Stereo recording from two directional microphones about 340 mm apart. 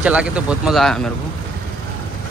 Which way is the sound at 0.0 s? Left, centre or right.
Centre.